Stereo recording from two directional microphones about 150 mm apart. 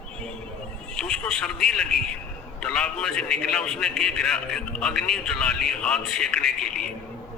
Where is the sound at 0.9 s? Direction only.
5° left (ahead or behind).